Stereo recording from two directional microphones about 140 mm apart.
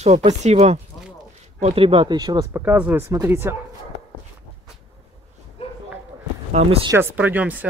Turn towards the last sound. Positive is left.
turn(degrees=-10)  # may be behind; listen again after turning